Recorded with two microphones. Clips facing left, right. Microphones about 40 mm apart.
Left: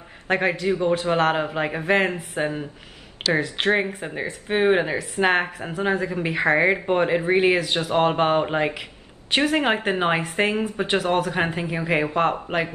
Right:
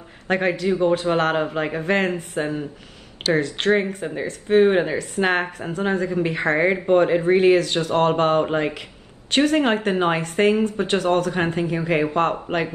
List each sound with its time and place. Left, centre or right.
0.3 s a man's voice: centre